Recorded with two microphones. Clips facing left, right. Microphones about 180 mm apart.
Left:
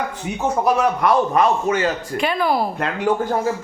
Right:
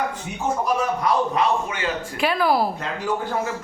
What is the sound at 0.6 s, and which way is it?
Speech, 70° left (ahead or behind).